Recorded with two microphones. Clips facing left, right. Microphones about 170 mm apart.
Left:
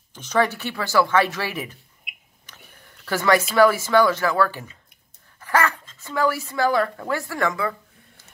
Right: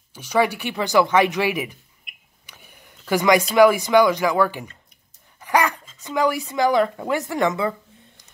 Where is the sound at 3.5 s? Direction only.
15° right (ahead or behind).